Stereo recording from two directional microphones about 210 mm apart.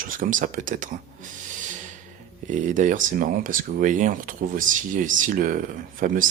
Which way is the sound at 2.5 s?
35° right (ahead or behind).